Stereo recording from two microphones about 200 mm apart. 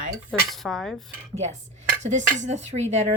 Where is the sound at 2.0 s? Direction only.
35° right (ahead or behind).